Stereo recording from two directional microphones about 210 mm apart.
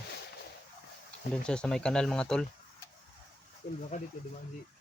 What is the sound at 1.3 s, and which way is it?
Speech, 5° left (ahead or behind).